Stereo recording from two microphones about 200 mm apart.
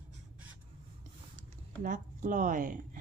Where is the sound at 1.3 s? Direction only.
40° right (ahead or behind).